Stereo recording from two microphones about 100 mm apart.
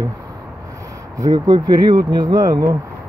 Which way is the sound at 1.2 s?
40° right (ahead or behind).